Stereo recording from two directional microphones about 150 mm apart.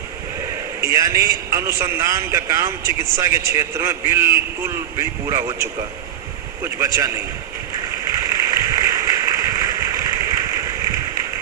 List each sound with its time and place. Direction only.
0.8 s a man's voice: 20° right (ahead or behind)
6.7 s speech: 20° right (ahead or behind)
8.2 s a sound: 20° right (ahead or behind)